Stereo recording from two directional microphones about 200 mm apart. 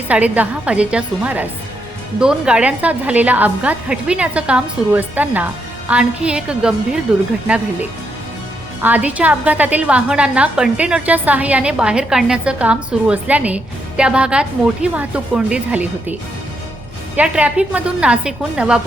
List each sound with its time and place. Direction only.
0.1 s a woman's voice: 5° right (ahead or behind)
17.2 s a woman's voice: 5° right (ahead or behind)